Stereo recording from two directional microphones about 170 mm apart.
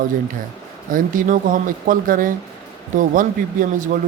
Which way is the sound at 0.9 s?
50° right (ahead or behind).